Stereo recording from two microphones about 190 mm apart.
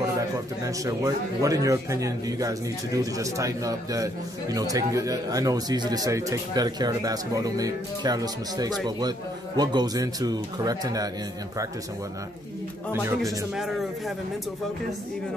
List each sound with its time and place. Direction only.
0.7 s speech: 15° right (ahead or behind)
12.9 s speech: 10° right (ahead or behind)
13.2 s a man's voice: centre (ahead or behind)